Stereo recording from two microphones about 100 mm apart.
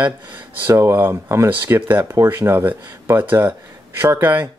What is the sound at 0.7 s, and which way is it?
Speech, 25° right (ahead or behind).